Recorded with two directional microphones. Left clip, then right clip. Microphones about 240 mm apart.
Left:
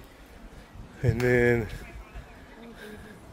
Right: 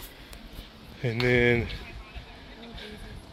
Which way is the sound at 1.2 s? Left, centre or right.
Left.